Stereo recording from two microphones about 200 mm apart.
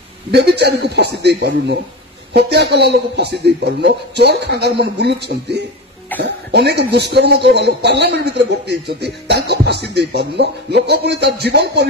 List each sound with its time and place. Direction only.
0.3 s a man's voice: 55° right (ahead or behind)